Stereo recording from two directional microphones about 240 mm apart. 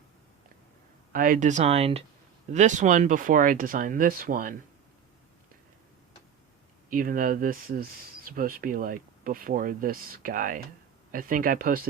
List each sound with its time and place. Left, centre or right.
1.1 s speech: right
6.9 s speech: right